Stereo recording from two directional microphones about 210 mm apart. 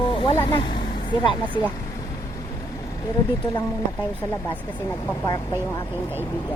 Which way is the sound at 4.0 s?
10° left (ahead or behind).